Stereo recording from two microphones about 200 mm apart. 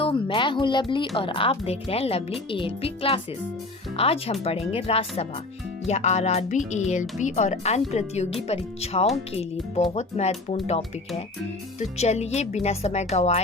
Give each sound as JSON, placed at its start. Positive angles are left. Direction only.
{"t": 0.0, "sound": "speech", "side_deg": 25}